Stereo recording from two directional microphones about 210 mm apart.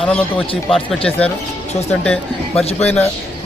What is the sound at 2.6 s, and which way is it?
Speech, 30° left (ahead or behind).